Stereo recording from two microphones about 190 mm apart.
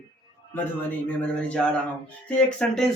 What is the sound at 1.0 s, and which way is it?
Speech, 5° left (ahead or behind).